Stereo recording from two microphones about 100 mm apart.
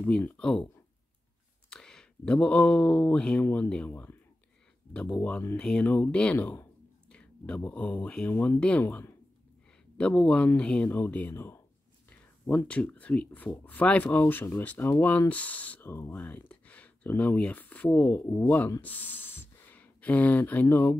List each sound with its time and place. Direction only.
0.0 s speech: 10° left (ahead or behind)
1.7 s speech: 5° left (ahead or behind)
11.3 s speech: 25° left (ahead or behind)
12.1 s speech: 15° left (ahead or behind)
18.8 s a sound: 15° left (ahead or behind)
20.6 s speech: 20° left (ahead or behind)